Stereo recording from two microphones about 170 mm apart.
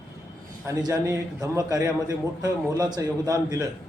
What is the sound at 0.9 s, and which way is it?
A man's voice, 20° right (ahead or behind).